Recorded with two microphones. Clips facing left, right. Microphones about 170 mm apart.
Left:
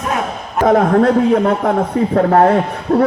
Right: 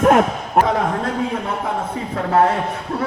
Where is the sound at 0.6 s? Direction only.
55° left (ahead or behind).